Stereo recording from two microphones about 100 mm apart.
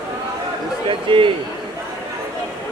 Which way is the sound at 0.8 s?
55° right (ahead or behind).